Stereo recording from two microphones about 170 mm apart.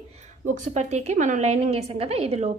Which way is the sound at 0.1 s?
45° right (ahead or behind).